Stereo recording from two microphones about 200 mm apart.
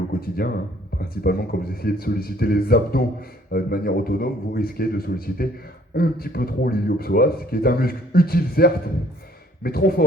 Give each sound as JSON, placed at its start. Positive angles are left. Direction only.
{"t": 0.2, "sound": "speech", "side_deg": 50}